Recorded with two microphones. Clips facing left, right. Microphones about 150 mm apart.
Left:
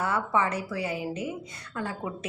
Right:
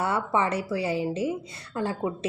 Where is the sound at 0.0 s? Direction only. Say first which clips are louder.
Right 1 dB; 25° right (ahead or behind).